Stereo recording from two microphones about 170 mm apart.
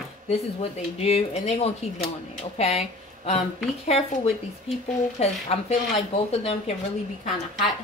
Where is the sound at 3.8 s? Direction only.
40° left (ahead or behind).